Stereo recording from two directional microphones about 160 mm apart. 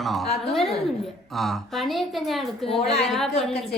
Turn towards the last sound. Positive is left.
turn(degrees=0)  # may be behind; listen again after turning